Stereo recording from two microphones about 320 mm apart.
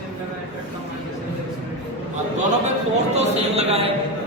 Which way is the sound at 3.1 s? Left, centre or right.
Centre.